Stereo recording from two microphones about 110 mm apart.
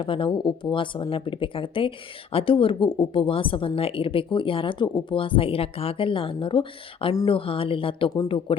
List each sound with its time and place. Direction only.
0.0 s a woman's voice: 50° left (ahead or behind)